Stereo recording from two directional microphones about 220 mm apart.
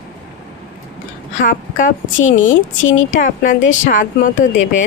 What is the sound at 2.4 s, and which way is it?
Speech, 60° left (ahead or behind).